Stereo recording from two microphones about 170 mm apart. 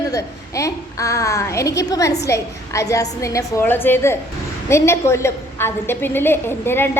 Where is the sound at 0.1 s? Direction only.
20° left (ahead or behind).